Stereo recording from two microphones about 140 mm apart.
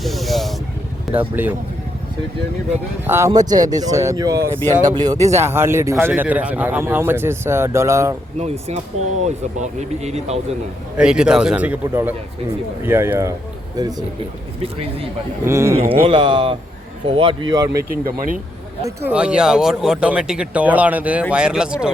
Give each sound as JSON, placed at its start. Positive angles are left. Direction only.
{"t": 0.0, "sound": "snake", "side_deg": 0}
{"t": 1.1, "sound": "a man's voice", "side_deg": -15}
{"t": 3.1, "sound": "a man's voice", "side_deg": -20}
{"t": 8.4, "sound": "speech", "side_deg": -50}
{"t": 10.9, "sound": "a man's voice", "side_deg": -5}
{"t": 15.4, "sound": "speech", "side_deg": -20}
{"t": 16.0, "sound": "speech", "side_deg": -35}
{"t": 17.9, "sound": "speech", "side_deg": -90}
{"t": 19.1, "sound": "a man's voice", "side_deg": -5}